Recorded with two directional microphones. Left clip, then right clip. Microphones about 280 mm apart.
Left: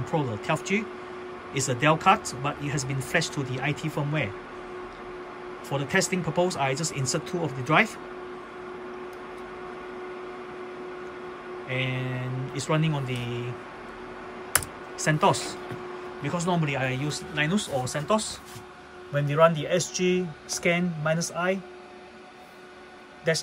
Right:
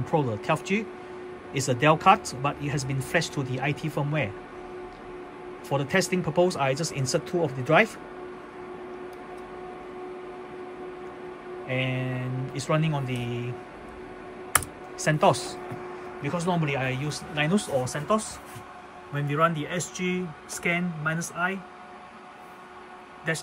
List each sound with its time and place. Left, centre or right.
0.0 s speech: centre
5.7 s speech: centre
11.6 s speech: centre
15.0 s speech: centre
20.5 s speech: centre